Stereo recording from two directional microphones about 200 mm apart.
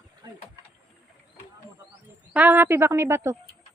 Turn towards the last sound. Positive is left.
turn(degrees=-10)  # may be behind; listen again after turning